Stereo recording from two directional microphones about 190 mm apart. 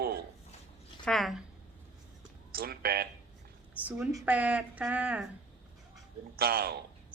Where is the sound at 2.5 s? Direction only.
55° right (ahead or behind).